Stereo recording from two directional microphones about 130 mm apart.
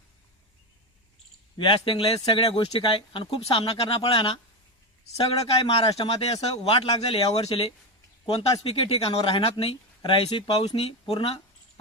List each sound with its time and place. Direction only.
1.5 s speech: 40° left (ahead or behind)